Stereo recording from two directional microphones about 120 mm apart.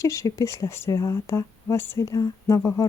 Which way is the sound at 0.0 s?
25° left (ahead or behind).